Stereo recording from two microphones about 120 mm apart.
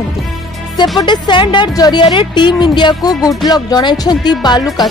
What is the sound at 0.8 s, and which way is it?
Speech, 40° left (ahead or behind).